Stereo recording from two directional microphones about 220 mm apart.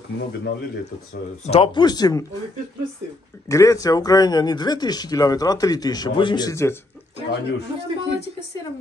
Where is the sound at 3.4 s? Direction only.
15° left (ahead or behind).